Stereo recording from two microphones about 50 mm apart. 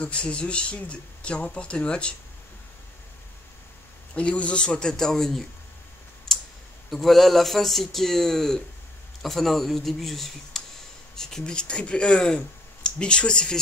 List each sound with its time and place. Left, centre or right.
0.0 s speech: left
4.1 s speech: left; by 5.5 s centre
6.3 s clicking: centre
6.9 s speech: centre